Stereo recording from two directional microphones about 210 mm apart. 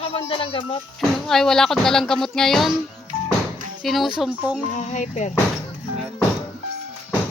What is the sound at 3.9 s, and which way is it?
Speech, centre (ahead or behind).